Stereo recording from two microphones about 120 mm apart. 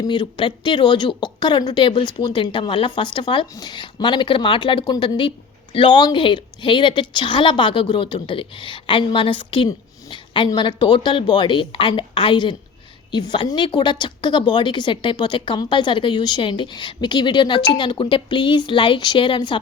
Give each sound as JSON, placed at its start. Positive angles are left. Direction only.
{"t": 0.0, "sound": "a woman's voice", "side_deg": 40}